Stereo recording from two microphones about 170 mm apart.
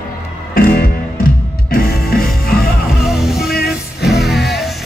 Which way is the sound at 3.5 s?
65° left (ahead or behind).